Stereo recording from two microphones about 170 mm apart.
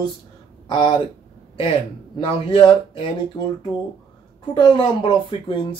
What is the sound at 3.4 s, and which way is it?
Speech, 15° left (ahead or behind).